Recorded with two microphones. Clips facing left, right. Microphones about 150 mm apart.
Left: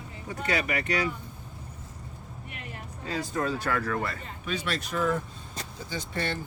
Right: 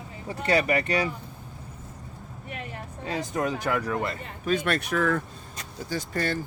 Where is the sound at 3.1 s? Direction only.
15° right (ahead or behind).